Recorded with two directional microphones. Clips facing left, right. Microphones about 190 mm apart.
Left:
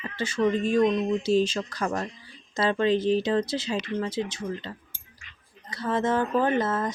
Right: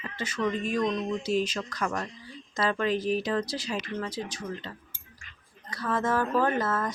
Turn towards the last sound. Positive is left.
turn(degrees=20)  # may be behind; listen again after turning